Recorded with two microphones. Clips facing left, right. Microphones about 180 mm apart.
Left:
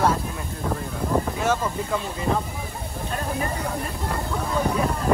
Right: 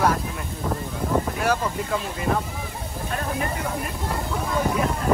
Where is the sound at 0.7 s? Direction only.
5° left (ahead or behind).